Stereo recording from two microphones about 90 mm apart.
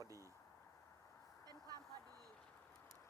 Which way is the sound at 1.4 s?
45° right (ahead or behind).